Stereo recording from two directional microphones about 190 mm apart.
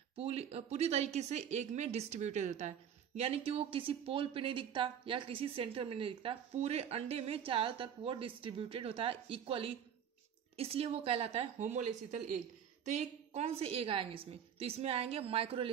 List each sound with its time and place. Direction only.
0.1 s a woman's voice: 30° right (ahead or behind)